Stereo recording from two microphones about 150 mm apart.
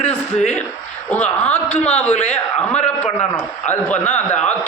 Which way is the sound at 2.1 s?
50° left (ahead or behind).